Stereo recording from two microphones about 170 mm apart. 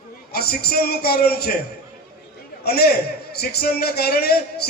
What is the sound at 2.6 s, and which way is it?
A man's voice, 70° left (ahead or behind).